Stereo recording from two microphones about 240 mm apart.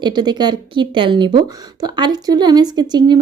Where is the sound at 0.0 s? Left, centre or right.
Centre.